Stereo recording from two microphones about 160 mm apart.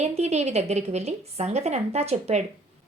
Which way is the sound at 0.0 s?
45° right (ahead or behind).